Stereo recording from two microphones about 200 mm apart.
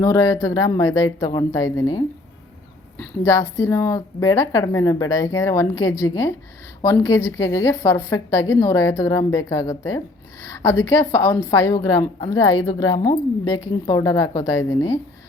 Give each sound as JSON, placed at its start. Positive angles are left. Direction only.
{"t": 0.0, "sound": "a woman's voice", "side_deg": 15}